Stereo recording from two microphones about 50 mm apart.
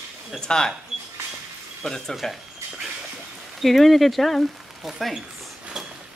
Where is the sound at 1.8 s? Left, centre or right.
Centre.